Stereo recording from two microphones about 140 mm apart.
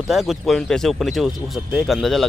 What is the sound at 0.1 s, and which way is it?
Speech, centre (ahead or behind).